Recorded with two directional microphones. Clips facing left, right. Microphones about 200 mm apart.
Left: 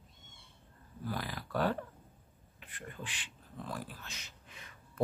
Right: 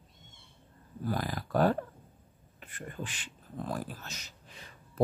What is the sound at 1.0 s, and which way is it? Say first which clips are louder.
A man's voice: right 6 dB; 45° right (ahead or behind).